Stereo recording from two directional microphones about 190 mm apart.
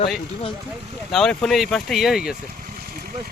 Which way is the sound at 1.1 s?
5° left (ahead or behind).